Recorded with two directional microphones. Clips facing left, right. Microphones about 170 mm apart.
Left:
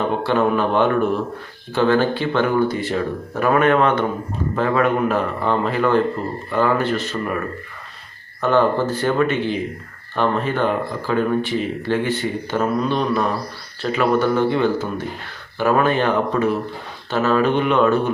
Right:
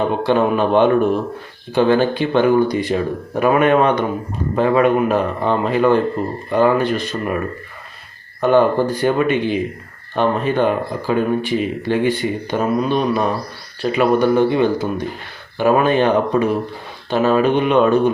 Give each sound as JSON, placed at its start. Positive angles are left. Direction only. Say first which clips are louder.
{"t": 0.2, "sound": "speech", "louder": "right 2 dB", "side_deg": -15}
{"t": 8.4, "sound": "speech", "louder": "right 3 dB", "side_deg": -15}